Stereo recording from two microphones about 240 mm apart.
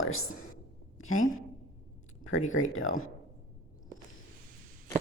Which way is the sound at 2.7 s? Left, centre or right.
Left.